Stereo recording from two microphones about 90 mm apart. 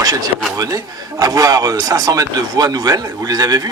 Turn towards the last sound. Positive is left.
turn(degrees=-45)  # may be behind; listen again after turning